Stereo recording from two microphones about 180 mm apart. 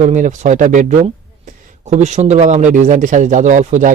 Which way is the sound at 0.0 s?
45° right (ahead or behind).